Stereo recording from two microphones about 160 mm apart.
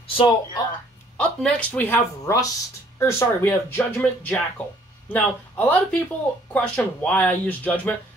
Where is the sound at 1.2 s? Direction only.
5° left (ahead or behind).